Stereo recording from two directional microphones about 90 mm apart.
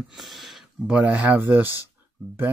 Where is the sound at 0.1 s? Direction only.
Centre (ahead or behind).